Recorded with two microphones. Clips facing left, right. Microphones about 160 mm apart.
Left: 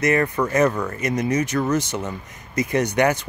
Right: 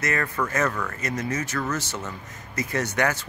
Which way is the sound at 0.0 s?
20° left (ahead or behind).